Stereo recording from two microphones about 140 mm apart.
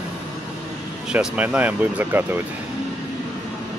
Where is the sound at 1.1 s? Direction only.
10° right (ahead or behind).